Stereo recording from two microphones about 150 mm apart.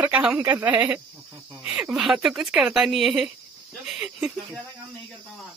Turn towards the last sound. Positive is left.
turn(degrees=-5)  # may be behind; listen again after turning